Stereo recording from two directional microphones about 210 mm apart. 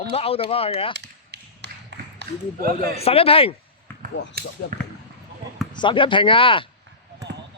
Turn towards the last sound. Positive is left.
turn(degrees=25)  # may be behind; listen again after turning